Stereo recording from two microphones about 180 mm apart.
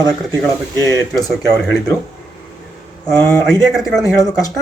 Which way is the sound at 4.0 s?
20° left (ahead or behind).